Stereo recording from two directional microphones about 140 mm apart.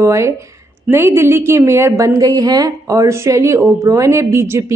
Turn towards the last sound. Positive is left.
turn(degrees=-20)  # may be behind; listen again after turning